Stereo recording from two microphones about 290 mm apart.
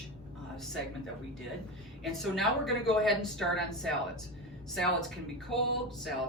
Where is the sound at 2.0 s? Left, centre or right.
Centre.